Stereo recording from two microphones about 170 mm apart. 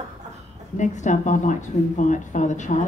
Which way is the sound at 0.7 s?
45° left (ahead or behind).